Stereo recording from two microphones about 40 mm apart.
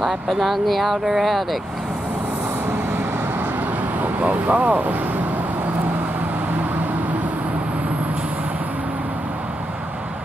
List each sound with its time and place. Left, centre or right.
0.0 s speech: centre
4.0 s speech: right